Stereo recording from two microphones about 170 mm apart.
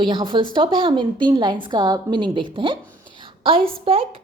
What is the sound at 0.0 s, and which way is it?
A woman's voice, 25° right (ahead or behind).